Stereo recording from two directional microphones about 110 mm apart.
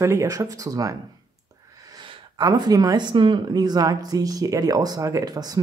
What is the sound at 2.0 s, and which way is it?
Speech, 40° right (ahead or behind).